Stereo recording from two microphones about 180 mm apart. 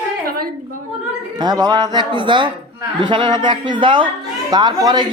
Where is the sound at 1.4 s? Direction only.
20° right (ahead or behind).